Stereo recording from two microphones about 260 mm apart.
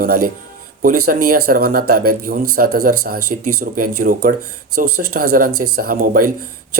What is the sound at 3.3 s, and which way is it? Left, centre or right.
Speech, right.